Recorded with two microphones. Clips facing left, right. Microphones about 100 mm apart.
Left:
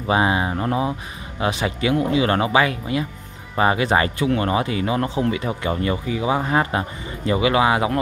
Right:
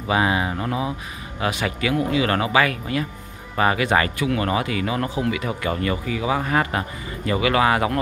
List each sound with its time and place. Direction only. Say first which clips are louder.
0.1 s speech: left 2 dB; 25° left (ahead or behind)